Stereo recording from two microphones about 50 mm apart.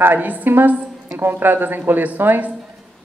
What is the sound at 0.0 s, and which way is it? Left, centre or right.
Speech, right.